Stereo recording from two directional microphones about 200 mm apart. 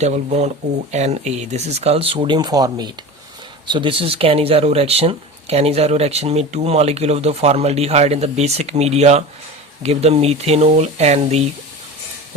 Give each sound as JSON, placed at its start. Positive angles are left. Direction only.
{"t": 0.0, "sound": "speech", "side_deg": -35}